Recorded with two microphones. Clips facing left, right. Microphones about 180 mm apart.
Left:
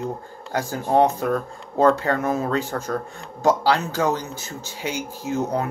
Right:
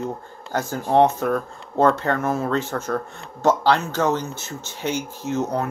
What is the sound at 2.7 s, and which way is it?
Speech, 35° left (ahead or behind).